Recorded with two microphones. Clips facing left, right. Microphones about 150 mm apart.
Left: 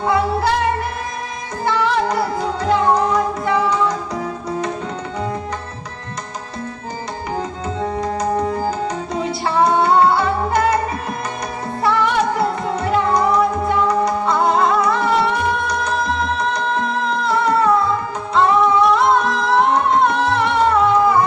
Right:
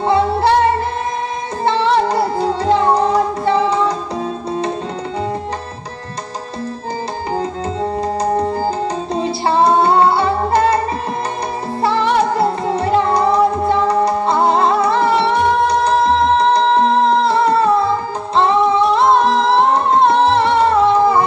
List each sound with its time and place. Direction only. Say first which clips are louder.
0.0 s music: right 3 dB; 30° right (ahead or behind)
1.6 s music: right 3 dB; 30° right (ahead or behind)
8.0 s music: right 2 dB; 30° right (ahead or behind)
11.8 s music: right 2 dB; 30° right (ahead or behind)